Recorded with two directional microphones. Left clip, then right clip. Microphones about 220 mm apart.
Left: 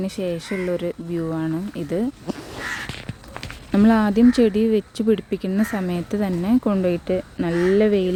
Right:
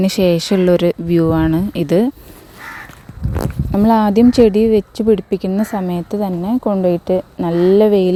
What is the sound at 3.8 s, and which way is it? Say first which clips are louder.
Speech: right 6 dB; 20° right (ahead or behind).